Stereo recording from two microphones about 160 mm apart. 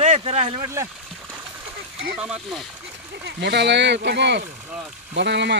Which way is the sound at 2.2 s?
5° right (ahead or behind).